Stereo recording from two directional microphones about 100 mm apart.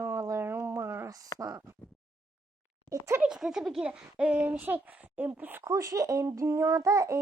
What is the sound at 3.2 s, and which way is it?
Speech, 5° right (ahead or behind).